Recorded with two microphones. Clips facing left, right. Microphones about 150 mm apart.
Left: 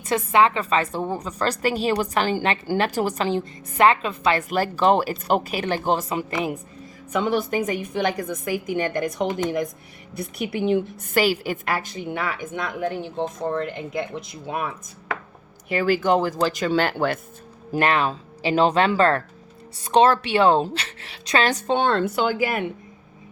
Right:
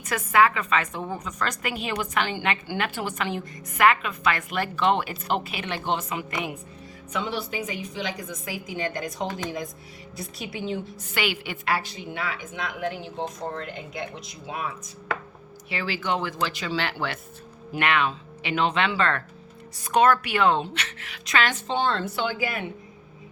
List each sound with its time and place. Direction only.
0.0 s a woman's voice: 25° left (ahead or behind)
7.1 s a woman's voice: 50° left (ahead or behind)
11.1 s a woman's voice: 40° left (ahead or behind); by 14.7 s 55° left (ahead or behind)
15.7 s a woman's voice: 50° left (ahead or behind); by 21.6 s 30° left (ahead or behind)
21.7 s a woman's voice: 55° left (ahead or behind)